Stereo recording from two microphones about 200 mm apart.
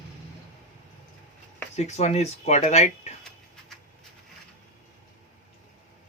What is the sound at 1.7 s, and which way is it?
Speech, 35° left (ahead or behind).